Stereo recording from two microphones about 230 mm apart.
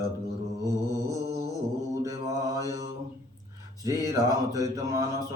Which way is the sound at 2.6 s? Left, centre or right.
Centre.